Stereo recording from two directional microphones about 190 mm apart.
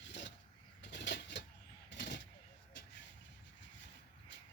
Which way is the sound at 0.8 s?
65° left (ahead or behind).